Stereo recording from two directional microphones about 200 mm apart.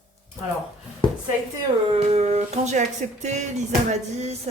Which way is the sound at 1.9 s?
30° right (ahead or behind).